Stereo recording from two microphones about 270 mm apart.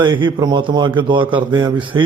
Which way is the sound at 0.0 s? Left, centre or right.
Centre.